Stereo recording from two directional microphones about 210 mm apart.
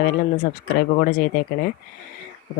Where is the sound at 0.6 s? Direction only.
45° left (ahead or behind).